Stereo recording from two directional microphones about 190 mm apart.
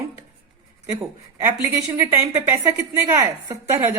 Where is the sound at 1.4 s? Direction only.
10° right (ahead or behind).